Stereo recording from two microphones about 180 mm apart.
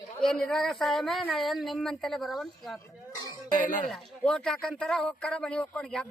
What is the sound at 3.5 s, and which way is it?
Speech, 45° left (ahead or behind).